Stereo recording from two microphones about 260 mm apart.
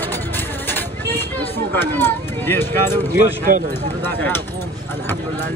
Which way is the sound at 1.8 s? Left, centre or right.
Centre.